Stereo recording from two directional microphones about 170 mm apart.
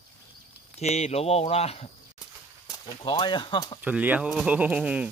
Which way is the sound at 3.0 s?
25° left (ahead or behind).